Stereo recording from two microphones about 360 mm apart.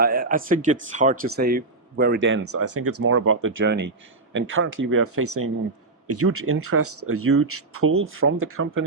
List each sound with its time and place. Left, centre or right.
0.0 s speech: right